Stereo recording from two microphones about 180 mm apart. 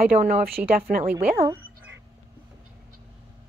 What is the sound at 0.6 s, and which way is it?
Speech, 55° right (ahead or behind).